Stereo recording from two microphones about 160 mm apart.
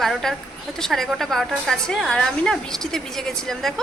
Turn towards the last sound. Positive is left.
turn(degrees=0)  # may be behind; listen again after turning